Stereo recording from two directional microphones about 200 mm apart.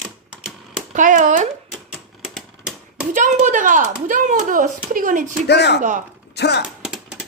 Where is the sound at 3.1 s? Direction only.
40° right (ahead or behind).